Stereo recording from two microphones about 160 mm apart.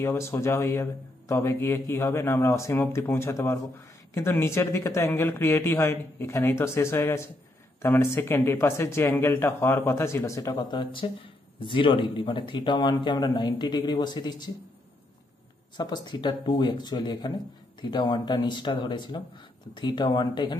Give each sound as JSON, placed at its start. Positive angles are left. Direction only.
{"t": 0.0, "sound": "speech", "side_deg": 15}
{"t": 15.8, "sound": "speech", "side_deg": 25}